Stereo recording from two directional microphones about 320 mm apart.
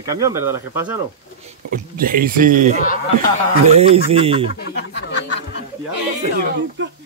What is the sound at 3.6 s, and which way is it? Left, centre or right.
Speech, centre.